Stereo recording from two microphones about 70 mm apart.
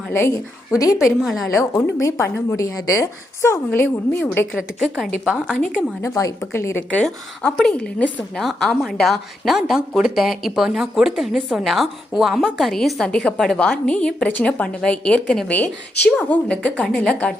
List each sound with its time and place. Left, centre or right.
0.1 s a woman's voice: left
0.9 s speech: centre
2.0 s a woman's voice: left
3.7 s speech: left
4.5 s speech: centre
5.5 s a woman's voice: centre
6.1 s a woman's voice: left
6.5 s speech: left
6.9 s a woman's voice: centre
8.4 s a woman's voice: centre